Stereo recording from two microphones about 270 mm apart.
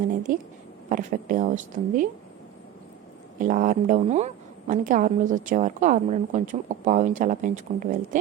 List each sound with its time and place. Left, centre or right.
0.3 s a woman's voice: right
3.4 s a woman's voice: right